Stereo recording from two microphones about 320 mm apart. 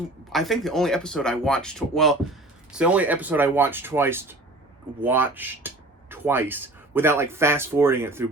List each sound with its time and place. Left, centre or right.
0.3 s speech: centre